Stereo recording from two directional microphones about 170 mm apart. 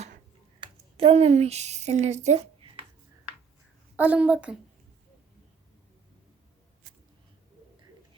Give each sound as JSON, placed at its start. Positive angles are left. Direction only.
{"t": 0.6, "sound": "speech", "side_deg": -30}
{"t": 3.9, "sound": "a woman's voice", "side_deg": -10}
{"t": 6.8, "sound": "a sound", "side_deg": -50}